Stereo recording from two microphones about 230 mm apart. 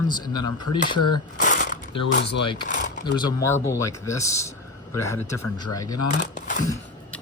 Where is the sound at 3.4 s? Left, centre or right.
Centre.